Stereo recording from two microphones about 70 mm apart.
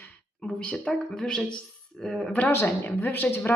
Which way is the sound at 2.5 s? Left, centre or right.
Left.